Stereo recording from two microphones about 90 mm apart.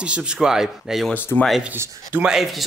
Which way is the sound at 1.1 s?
20° left (ahead or behind).